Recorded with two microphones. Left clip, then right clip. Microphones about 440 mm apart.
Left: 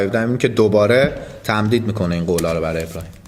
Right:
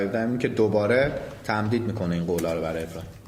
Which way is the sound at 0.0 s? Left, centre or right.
Left.